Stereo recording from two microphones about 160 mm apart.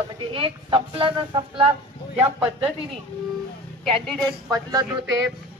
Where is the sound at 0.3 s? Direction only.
35° right (ahead or behind).